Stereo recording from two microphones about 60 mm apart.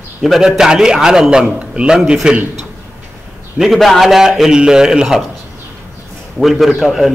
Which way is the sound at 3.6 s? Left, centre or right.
Centre.